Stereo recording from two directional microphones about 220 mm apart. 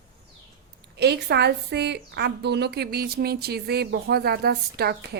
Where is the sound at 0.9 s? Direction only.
50° right (ahead or behind).